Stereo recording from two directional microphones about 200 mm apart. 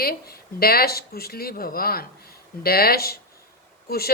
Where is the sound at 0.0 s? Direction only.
50° left (ahead or behind).